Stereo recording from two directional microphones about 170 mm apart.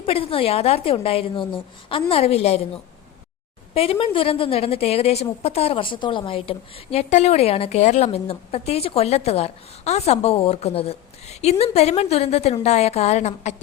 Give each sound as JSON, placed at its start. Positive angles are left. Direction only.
{"t": 0.0, "sound": "a woman's voice", "side_deg": 35}
{"t": 3.8, "sound": "a woman's voice", "side_deg": 30}